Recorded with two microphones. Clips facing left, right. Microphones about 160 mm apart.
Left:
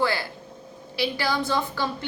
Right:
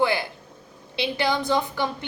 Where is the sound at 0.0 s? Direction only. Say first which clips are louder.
Right 2 dB; 20° right (ahead or behind).